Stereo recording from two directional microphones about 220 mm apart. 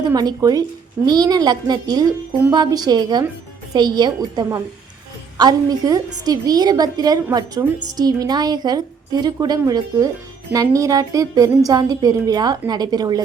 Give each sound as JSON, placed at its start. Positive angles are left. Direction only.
{"t": 0.0, "sound": "a woman's voice", "side_deg": -20}